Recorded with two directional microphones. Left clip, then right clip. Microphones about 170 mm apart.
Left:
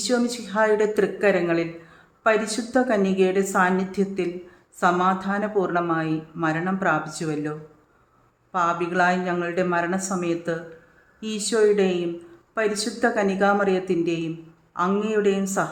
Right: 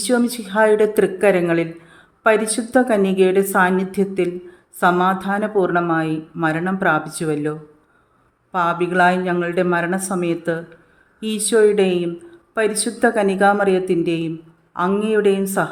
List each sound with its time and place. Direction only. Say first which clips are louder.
0.0 s speech: right 4 dB; 35° right (ahead or behind)
8.5 s speech: right 4 dB; 35° right (ahead or behind)